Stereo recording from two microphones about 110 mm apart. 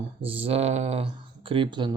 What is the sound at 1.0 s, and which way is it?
Speech, 50° right (ahead or behind).